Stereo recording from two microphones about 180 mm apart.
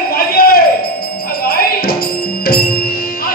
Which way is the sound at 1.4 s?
55° left (ahead or behind).